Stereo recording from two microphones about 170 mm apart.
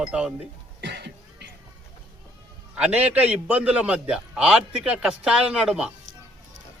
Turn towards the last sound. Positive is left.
turn(degrees=-5)  # may be behind; listen again after turning